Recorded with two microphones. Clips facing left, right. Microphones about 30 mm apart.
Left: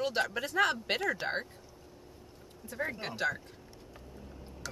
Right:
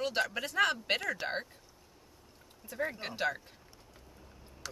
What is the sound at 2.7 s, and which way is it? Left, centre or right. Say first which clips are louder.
Speech: even; centre.